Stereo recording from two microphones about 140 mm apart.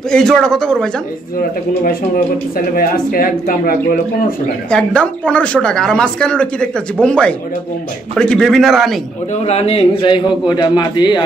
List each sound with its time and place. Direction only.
0.1 s speech: 5° left (ahead or behind)
2.5 s speech: 90° left
4.6 s speech: 5° left (ahead or behind)
9.3 s a man's voice: 50° left (ahead or behind)